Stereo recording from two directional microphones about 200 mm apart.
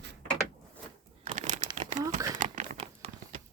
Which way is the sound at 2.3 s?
35° right (ahead or behind).